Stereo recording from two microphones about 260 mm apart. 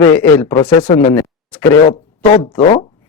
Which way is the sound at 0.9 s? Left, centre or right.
Left.